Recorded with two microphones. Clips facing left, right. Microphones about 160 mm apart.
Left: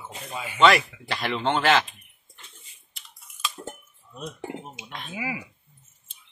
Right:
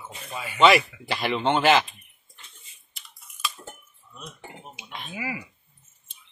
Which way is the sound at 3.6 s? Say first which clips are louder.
Left 5 dB; 25° left (ahead or behind).